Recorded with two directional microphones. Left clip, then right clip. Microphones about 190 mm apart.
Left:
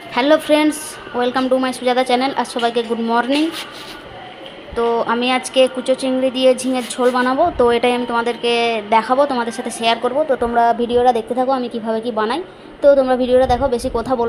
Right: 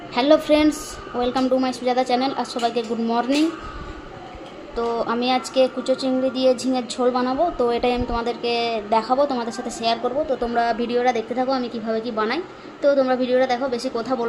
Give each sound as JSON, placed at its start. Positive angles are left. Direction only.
{"t": 0.1, "sound": "a woman's voice", "side_deg": 5}
{"t": 4.7, "sound": "a woman's voice", "side_deg": 15}